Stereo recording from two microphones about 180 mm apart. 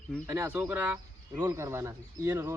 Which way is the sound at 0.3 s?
15° right (ahead or behind).